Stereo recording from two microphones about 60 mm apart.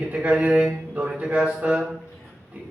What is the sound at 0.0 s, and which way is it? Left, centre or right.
A man's voice, right.